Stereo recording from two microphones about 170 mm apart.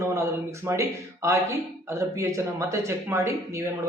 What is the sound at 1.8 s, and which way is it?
Speech, 15° right (ahead or behind).